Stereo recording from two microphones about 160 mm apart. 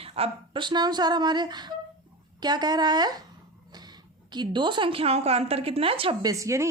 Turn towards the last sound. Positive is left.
turn(degrees=-20)  # may be behind; listen again after turning